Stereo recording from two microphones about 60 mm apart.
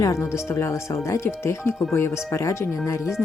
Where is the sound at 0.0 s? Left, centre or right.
Left.